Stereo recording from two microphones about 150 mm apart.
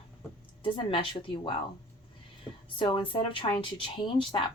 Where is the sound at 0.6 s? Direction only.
35° left (ahead or behind).